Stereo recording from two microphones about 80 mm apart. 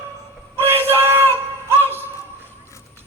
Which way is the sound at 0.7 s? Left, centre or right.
Right.